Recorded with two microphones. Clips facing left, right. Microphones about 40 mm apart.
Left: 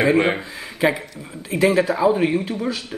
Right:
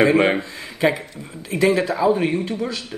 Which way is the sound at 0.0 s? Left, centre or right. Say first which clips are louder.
Right 2 dB; centre.